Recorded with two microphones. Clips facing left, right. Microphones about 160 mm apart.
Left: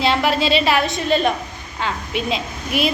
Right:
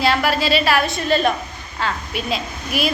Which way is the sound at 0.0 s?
20° left (ahead or behind).